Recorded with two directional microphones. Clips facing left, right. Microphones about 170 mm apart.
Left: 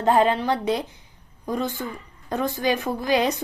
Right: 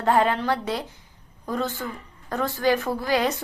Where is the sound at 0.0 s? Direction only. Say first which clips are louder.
Left 2 dB; 20° left (ahead or behind).